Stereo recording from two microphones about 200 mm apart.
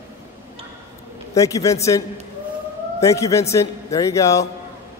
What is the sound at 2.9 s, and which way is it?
A man's voice, 15° left (ahead or behind).